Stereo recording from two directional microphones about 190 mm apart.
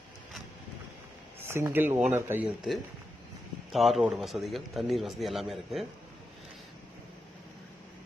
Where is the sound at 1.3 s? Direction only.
15° right (ahead or behind).